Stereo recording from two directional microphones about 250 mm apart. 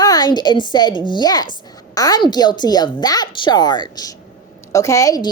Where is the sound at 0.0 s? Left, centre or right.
Centre.